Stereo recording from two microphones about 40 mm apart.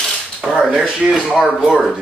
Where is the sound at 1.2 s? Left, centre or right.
Centre.